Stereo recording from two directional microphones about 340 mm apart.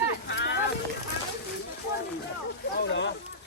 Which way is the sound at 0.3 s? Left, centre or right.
Left.